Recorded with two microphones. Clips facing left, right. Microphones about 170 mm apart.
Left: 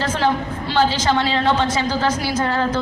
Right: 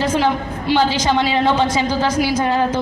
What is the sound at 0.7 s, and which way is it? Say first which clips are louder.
A woman's voice: right 2 dB; 15° right (ahead or behind).